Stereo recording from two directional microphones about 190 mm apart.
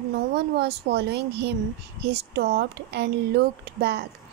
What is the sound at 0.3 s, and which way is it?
A woman's voice, 60° right (ahead or behind).